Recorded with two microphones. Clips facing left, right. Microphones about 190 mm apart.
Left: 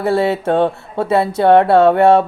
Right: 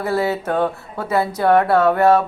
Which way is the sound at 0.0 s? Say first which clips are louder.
Left 5 dB; 25° left (ahead or behind).